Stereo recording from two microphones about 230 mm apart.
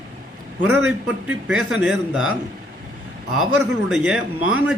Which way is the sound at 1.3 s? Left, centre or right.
Centre.